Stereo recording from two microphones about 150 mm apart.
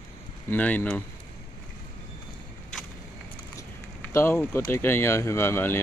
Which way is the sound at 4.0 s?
15° left (ahead or behind).